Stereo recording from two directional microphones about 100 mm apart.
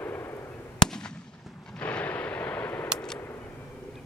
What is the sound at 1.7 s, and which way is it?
Artillery fire, 15° left (ahead or behind).